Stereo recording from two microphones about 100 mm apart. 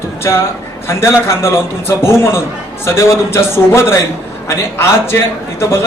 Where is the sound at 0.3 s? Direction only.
35° left (ahead or behind).